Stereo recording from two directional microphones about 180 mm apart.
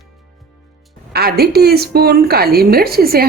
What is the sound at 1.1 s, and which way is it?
A woman's voice, 60° right (ahead or behind).